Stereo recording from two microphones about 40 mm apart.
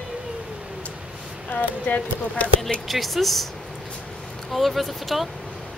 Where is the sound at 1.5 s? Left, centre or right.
Left.